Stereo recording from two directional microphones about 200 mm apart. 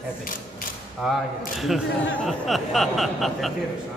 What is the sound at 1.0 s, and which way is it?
Speech, centre (ahead or behind).